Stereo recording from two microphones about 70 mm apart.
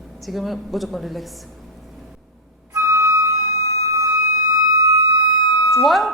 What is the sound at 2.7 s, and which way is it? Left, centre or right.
Flute, right.